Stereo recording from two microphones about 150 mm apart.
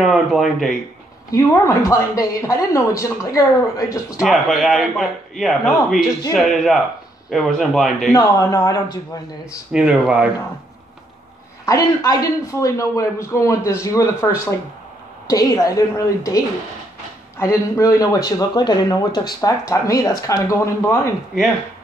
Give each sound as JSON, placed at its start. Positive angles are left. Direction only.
{"t": 0.0, "sound": "speech", "side_deg": 0}
{"t": 1.3, "sound": "a man's voice", "side_deg": 20}
{"t": 4.2, "sound": "speech", "side_deg": -5}
{"t": 8.1, "sound": "a man's voice", "side_deg": 25}
{"t": 9.7, "sound": "speech", "side_deg": -5}
{"t": 11.6, "sound": "a man's voice", "side_deg": 20}